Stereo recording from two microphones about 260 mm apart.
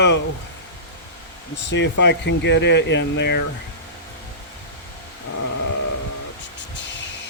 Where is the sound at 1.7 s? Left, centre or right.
Left.